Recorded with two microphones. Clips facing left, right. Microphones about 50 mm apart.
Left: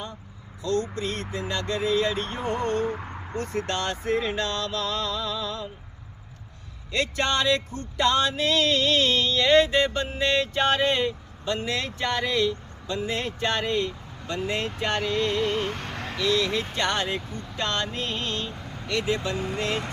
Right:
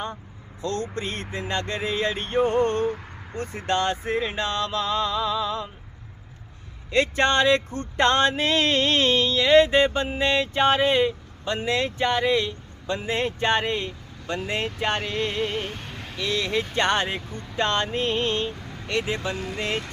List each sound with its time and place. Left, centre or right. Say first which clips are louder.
0.6 s speech: left 1 dB; right
3.3 s speech: right 3 dB; centre
6.9 s speech: right 5 dB; right
9.1 s a sound: right 4 dB; centre
9.6 s a sound: right 3 dB; right
11.4 s speech: right 3 dB; centre
15.6 s vehicle: left 4 dB; left
16.2 s speech: left 1 dB; right
18.6 s vehicle: even; centre
18.9 s speech: even; right